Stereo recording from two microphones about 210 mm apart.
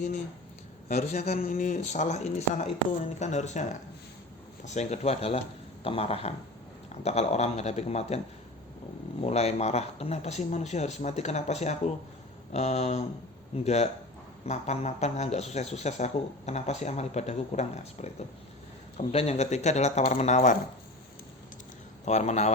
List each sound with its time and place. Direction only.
0.9 s speech: 30° left (ahead or behind)
9.2 s speech: 30° left (ahead or behind)
22.0 s speech: 35° left (ahead or behind)